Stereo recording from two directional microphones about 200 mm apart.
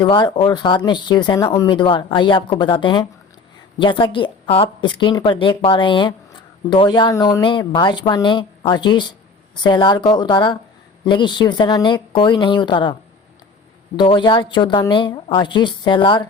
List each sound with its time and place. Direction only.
0.0 s speech: 20° left (ahead or behind)